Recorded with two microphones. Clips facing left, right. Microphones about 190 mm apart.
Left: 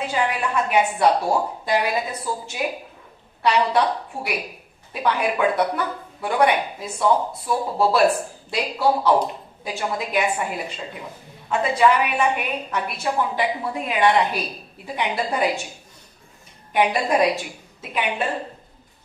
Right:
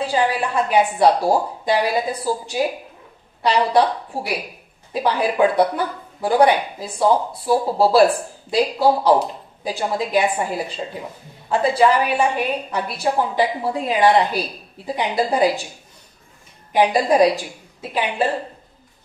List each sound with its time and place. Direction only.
0.0 s speech: 30° right (ahead or behind)
11.4 s speech: 30° right (ahead or behind)
16.7 s speech: 35° right (ahead or behind)